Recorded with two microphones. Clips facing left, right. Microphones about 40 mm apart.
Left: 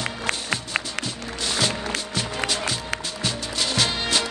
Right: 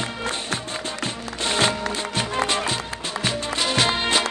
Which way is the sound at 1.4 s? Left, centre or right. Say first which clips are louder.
Right 4 dB; right.